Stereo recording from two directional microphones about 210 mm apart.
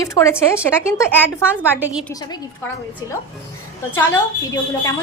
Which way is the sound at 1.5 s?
5° right (ahead or behind).